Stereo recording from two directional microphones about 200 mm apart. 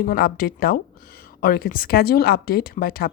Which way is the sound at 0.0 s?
45° left (ahead or behind).